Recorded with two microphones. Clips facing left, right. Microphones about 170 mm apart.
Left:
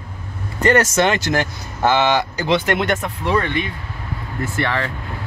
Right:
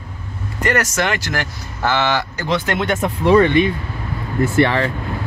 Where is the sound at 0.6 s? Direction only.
25° left (ahead or behind).